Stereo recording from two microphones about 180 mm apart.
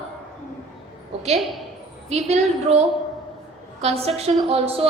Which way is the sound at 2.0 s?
35° right (ahead or behind).